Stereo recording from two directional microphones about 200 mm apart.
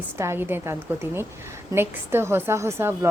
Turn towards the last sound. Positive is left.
turn(degrees=-10)  # may be behind; listen again after turning